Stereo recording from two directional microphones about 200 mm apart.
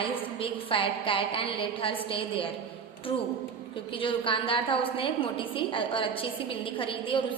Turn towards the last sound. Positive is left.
turn(degrees=25)  # may be behind; listen again after turning